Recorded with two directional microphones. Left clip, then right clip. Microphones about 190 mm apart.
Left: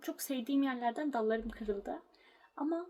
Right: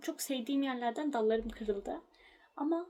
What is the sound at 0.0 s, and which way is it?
Speech, 25° right (ahead or behind).